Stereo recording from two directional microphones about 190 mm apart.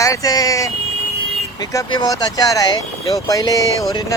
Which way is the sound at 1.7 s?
20° left (ahead or behind).